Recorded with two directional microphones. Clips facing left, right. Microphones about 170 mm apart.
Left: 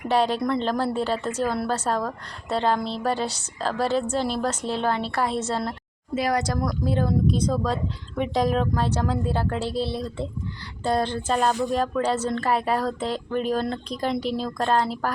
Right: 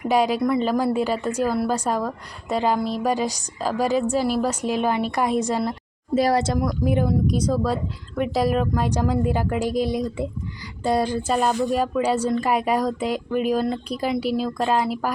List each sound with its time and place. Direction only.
0.1 s a woman's voice: 10° right (ahead or behind)
6.1 s speech: 30° right (ahead or behind)
6.6 s a woman's voice: 15° right (ahead or behind)